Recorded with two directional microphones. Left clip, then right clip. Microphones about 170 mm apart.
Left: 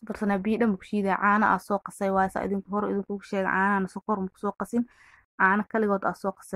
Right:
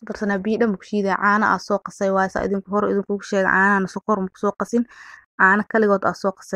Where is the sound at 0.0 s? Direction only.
30° right (ahead or behind).